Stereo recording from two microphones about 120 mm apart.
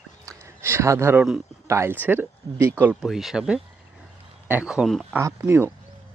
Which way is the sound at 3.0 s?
Centre (ahead or behind).